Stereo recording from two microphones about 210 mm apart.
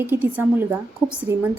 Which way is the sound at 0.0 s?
10° right (ahead or behind).